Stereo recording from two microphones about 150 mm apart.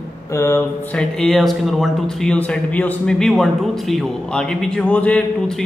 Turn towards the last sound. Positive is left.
turn(degrees=10)  # may be behind; listen again after turning